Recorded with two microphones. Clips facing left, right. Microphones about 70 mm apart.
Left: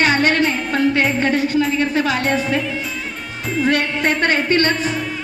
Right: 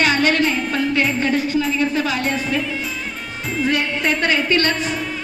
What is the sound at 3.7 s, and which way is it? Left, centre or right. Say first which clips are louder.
Speech: left 2 dB; left.